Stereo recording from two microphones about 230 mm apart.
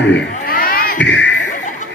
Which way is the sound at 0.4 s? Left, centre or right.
Left.